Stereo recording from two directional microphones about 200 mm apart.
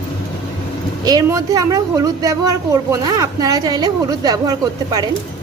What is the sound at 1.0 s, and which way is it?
A woman's voice, 20° right (ahead or behind).